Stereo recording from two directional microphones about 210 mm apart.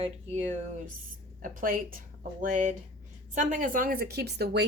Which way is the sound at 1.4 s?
40° right (ahead or behind).